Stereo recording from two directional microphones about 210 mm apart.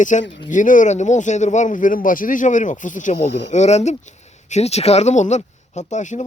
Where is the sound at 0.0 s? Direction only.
35° left (ahead or behind).